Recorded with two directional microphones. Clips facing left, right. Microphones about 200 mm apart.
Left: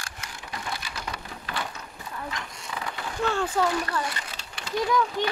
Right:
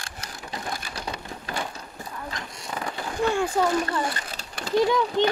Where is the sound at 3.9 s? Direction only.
35° right (ahead or behind).